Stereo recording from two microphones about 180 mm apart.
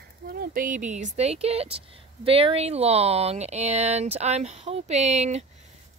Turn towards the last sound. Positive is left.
turn(degrees=-40)  # may be behind; listen again after turning